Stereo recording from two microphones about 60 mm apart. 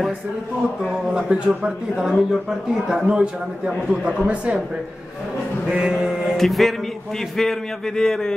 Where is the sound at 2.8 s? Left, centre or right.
Centre.